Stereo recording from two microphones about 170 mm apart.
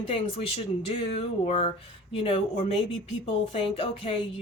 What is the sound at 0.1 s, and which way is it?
A woman's voice, 35° left (ahead or behind).